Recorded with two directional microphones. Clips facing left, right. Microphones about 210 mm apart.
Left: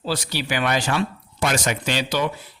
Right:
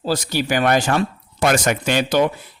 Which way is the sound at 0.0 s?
45° right (ahead or behind).